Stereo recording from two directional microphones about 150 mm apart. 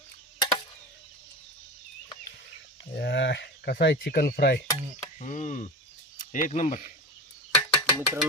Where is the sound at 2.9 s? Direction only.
90° left.